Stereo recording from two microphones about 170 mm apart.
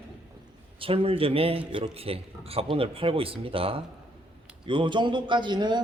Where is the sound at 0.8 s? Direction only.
35° right (ahead or behind).